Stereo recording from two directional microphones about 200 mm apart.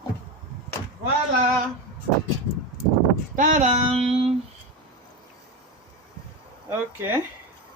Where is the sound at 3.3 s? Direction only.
40° right (ahead or behind).